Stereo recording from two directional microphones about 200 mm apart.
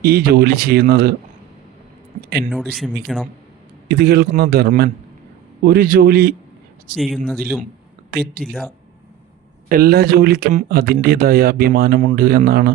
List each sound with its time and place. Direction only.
0.0 s speech: 50° right (ahead or behind)
2.5 s speech: centre (ahead or behind)
3.8 s speech: 50° right (ahead or behind)
6.9 s speech: centre (ahead or behind)
8.1 s speech: 50° right (ahead or behind)
9.6 s speech: 45° right (ahead or behind)